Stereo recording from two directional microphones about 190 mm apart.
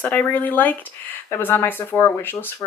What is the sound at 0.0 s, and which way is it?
Speech, 10° left (ahead or behind).